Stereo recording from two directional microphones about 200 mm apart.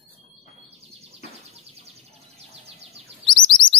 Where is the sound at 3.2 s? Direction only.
25° left (ahead or behind).